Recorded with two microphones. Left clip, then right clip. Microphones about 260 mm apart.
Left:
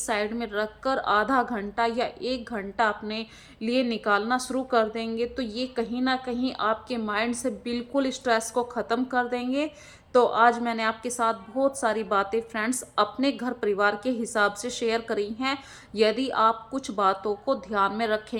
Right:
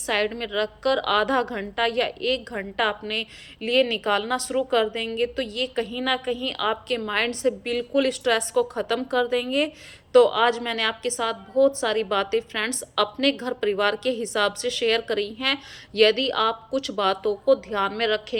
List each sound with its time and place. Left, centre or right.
0.0 s a woman's voice: centre